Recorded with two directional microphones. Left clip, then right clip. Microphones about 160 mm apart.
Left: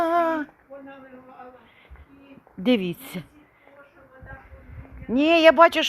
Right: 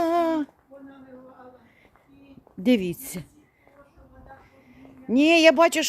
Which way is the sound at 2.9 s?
25° right (ahead or behind).